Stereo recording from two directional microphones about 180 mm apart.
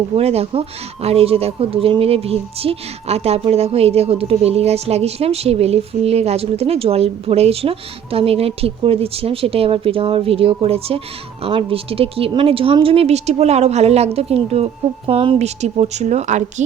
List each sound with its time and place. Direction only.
0.2 s speech: 35° right (ahead or behind)